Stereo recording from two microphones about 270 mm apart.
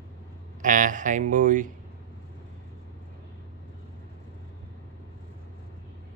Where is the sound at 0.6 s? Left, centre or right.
Right.